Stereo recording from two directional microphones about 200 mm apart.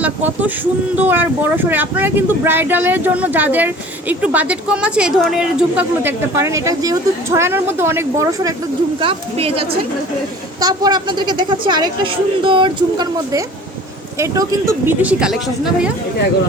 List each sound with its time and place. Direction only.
0.0 s speech: 10° right (ahead or behind)
9.0 s speech: 25° right (ahead or behind); by 15.9 s 5° right (ahead or behind)